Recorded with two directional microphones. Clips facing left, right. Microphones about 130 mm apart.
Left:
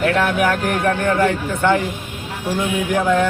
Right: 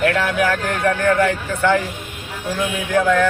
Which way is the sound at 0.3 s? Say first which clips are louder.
Left 1 dB; 20° left (ahead or behind).